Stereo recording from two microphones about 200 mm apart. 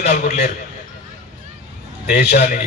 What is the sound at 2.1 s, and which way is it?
Speech, 55° left (ahead or behind).